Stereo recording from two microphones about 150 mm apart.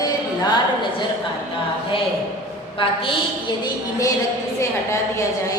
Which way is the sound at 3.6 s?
20° left (ahead or behind).